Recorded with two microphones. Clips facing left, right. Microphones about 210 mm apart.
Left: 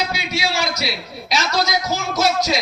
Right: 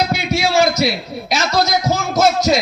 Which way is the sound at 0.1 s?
50° right (ahead or behind).